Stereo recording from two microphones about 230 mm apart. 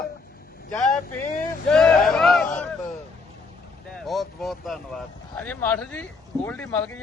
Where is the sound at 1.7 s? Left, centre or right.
Centre.